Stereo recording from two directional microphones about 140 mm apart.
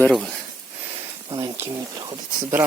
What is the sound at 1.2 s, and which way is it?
Speech, 30° right (ahead or behind).